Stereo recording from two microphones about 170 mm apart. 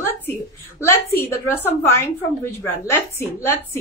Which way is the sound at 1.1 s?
10° left (ahead or behind).